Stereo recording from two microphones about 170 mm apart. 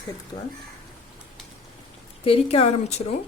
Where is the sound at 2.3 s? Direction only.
35° left (ahead or behind).